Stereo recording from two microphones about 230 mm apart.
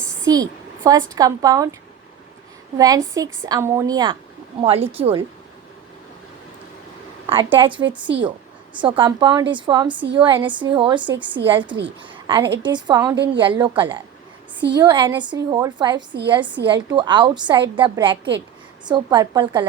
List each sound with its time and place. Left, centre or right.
0.3 s a woman's voice: centre
2.7 s a woman's voice: centre
7.3 s a woman's voice: right
7.8 s a woman's voice: right
8.8 s a woman's voice: right